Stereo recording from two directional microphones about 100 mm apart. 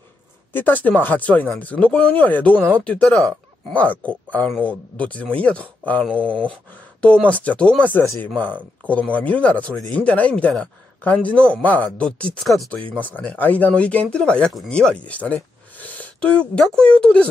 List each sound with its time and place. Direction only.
0.5 s speech: 20° left (ahead or behind)